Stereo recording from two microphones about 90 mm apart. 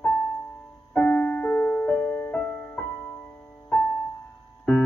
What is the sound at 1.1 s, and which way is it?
Music, 25° left (ahead or behind).